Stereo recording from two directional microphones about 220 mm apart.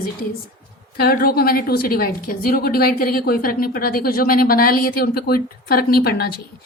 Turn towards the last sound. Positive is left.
turn(degrees=45)  # may be behind; listen again after turning